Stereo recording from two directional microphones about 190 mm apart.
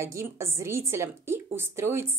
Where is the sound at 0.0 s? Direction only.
15° right (ahead or behind).